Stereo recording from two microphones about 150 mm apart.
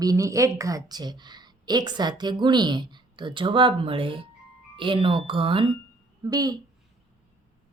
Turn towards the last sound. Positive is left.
turn(degrees=-25)  # may be behind; listen again after turning